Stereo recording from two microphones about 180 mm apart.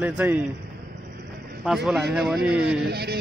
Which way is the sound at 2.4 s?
65° right (ahead or behind).